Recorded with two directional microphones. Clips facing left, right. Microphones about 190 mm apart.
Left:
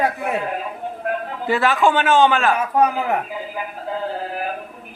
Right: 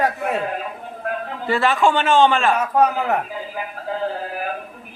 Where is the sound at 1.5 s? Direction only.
Centre (ahead or behind).